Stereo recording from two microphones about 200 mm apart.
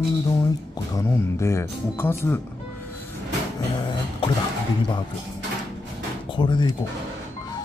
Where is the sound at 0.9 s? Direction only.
15° left (ahead or behind).